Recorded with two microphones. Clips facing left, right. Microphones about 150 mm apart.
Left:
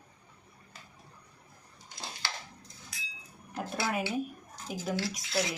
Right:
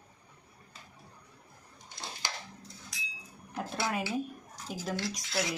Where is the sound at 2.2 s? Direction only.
15° right (ahead or behind).